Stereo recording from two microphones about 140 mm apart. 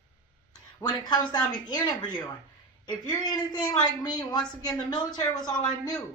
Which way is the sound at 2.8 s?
35° left (ahead or behind).